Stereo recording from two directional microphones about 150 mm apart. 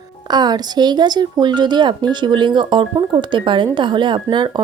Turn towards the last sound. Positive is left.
turn(degrees=-30)  # may be behind; listen again after turning